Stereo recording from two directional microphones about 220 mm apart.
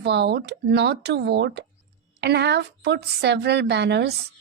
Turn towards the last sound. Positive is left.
turn(degrees=-50)  # may be behind; listen again after turning